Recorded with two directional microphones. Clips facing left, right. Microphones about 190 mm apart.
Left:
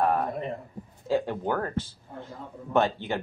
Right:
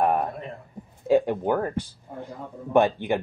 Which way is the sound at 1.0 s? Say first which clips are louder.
Right 6 dB; 15° right (ahead or behind).